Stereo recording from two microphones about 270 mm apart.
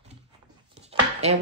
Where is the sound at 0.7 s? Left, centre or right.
Right.